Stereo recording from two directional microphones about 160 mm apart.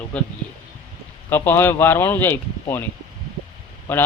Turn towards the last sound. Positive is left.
turn(degrees=10)  # may be behind; listen again after turning